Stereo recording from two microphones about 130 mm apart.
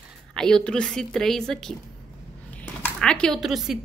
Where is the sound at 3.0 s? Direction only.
5° left (ahead or behind).